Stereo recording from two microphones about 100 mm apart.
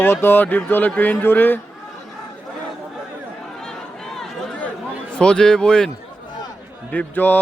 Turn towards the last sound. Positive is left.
turn(degrees=20)  # may be behind; listen again after turning